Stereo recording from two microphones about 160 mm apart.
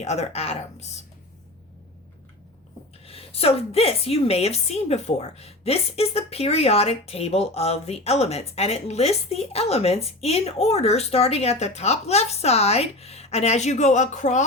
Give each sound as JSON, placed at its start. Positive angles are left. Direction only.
{"t": 0.0, "sound": "speech", "side_deg": 45}
{"t": 3.1, "sound": "a woman's voice", "side_deg": 40}